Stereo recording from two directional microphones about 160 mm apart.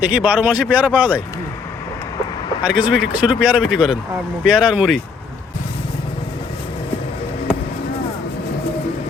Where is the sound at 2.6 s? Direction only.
5° right (ahead or behind).